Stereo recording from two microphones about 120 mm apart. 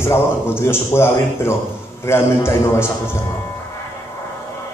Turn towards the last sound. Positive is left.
turn(degrees=20)  # may be behind; listen again after turning